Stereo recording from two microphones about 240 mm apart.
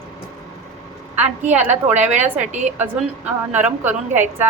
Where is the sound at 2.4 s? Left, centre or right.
Right.